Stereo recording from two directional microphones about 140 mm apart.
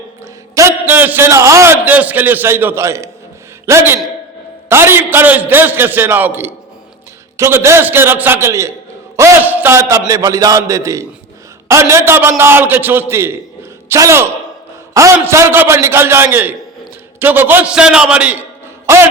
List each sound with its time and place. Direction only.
0.5 s a man's voice: 20° right (ahead or behind)